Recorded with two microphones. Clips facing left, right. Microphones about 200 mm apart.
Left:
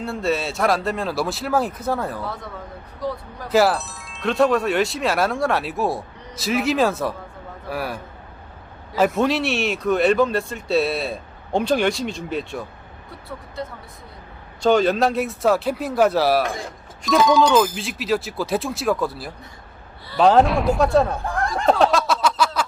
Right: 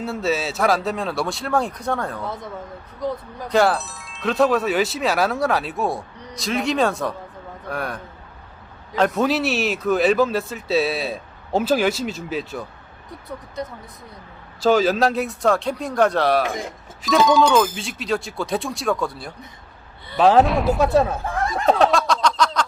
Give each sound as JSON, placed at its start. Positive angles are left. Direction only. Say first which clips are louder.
{"t": 0.0, "sound": "speech", "louder": "even", "side_deg": 0}
{"t": 2.2, "sound": "speech", "louder": "right 1 dB", "side_deg": -20}
{"t": 3.5, "sound": "speech", "louder": "left 1 dB", "side_deg": 0}
{"t": 13.1, "sound": "speech", "louder": "right 2 dB", "side_deg": -20}
{"t": 14.6, "sound": "speech", "louder": "even", "side_deg": 0}
{"t": 20.1, "sound": "a sound", "louder": "even", "side_deg": 0}